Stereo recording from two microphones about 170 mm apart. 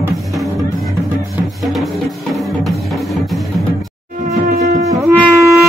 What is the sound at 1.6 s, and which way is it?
Music, centre (ahead or behind).